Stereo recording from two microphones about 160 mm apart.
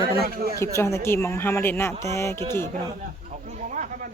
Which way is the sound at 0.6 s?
15° left (ahead or behind).